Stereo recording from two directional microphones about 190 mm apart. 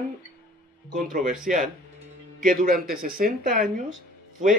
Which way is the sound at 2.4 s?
45° right (ahead or behind).